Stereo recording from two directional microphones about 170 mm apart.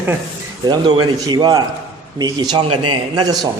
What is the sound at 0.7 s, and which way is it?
A man's voice, 25° right (ahead or behind).